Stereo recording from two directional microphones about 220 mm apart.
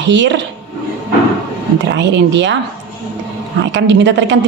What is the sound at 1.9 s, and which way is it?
Speech, 55° right (ahead or behind).